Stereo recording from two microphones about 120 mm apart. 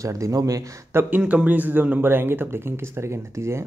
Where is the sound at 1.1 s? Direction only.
10° right (ahead or behind).